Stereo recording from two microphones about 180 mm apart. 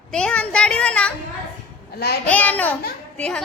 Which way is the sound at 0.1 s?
5° left (ahead or behind).